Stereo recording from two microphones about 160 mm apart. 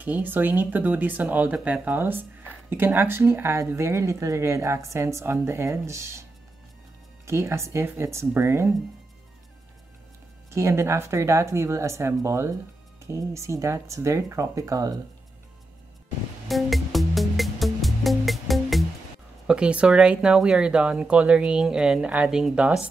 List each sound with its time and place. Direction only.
0.0 s speech: 10° right (ahead or behind)
7.2 s speech: 15° right (ahead or behind)
10.5 s speech: 15° right (ahead or behind)
16.4 s music: centre (ahead or behind)
19.4 s speech: 5° right (ahead or behind)